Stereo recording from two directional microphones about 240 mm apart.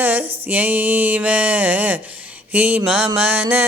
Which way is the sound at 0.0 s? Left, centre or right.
Centre.